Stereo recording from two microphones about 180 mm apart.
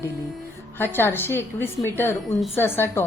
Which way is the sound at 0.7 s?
10° left (ahead or behind).